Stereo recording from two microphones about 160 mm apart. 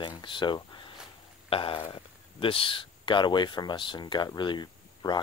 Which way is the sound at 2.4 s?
35° left (ahead or behind).